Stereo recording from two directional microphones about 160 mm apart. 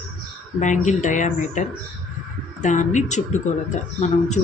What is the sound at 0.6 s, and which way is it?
Speech, 50° left (ahead or behind).